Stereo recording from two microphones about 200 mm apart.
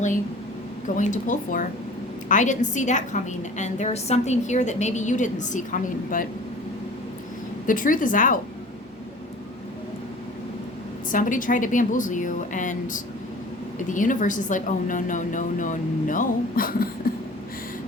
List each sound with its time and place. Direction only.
0.9 s a woman's voice: 40° left (ahead or behind)
7.7 s a woman's voice: 40° left (ahead or behind)
11.1 s a woman's voice: 40° left (ahead or behind)